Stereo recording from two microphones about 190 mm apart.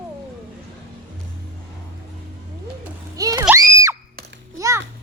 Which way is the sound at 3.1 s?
20° right (ahead or behind).